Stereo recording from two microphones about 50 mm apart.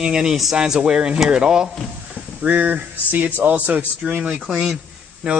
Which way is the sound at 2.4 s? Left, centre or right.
Right.